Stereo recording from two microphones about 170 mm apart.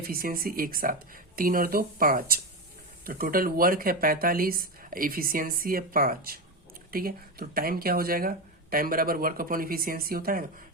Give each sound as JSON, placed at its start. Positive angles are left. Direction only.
{"t": 0.1, "sound": "speech", "side_deg": -60}